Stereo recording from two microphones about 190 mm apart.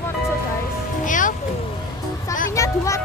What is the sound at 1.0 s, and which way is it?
Music, 45° left (ahead or behind).